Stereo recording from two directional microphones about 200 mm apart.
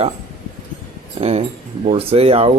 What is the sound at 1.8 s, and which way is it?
Speech, 30° right (ahead or behind).